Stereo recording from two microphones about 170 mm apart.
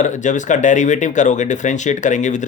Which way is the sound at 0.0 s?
45° left (ahead or behind).